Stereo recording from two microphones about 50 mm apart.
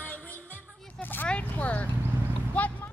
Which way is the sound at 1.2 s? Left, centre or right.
Left.